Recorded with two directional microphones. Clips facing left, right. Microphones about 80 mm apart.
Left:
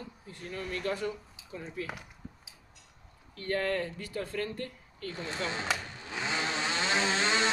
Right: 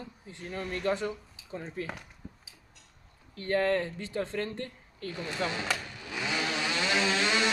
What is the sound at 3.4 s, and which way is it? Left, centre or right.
Speech, right.